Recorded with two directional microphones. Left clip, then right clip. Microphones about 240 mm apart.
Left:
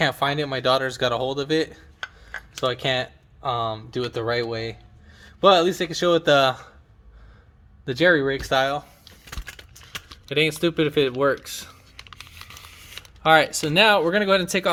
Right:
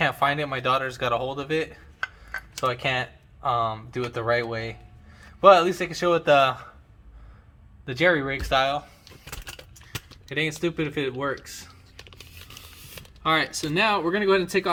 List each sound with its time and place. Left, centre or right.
0.0 s speech: left
7.9 s speech: left
10.6 s speech: left
13.2 s speech: left